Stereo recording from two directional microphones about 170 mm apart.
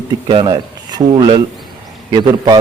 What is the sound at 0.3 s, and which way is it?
Speech, 30° right (ahead or behind).